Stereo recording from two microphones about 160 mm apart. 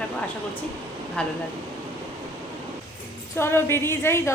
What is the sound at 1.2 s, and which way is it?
Speech, 5° left (ahead or behind).